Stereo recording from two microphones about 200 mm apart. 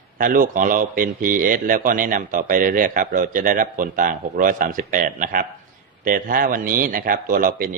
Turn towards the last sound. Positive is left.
turn(degrees=-45)  # may be behind; listen again after turning